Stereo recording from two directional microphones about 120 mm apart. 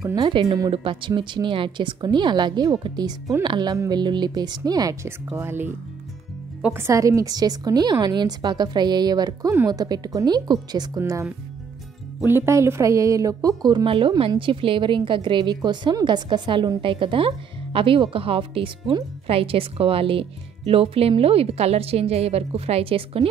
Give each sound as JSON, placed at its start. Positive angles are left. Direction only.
{"t": 0.0, "sound": "a woman's voice", "side_deg": -35}
{"t": 5.3, "sound": "speech", "side_deg": -20}
{"t": 6.7, "sound": "a woman's voice", "side_deg": -25}
{"t": 12.3, "sound": "a woman's voice", "side_deg": -20}